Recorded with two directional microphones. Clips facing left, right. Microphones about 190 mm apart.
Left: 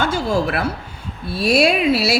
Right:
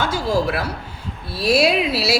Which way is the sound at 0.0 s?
55° left (ahead or behind).